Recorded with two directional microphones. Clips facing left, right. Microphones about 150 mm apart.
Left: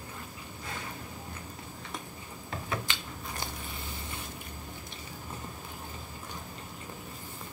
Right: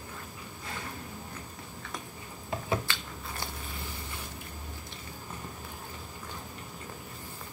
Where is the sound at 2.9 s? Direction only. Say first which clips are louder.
Right 1 dB; 20° left (ahead or behind).